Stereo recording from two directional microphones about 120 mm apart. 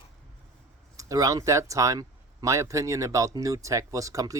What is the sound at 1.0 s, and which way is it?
Speech, 30° right (ahead or behind).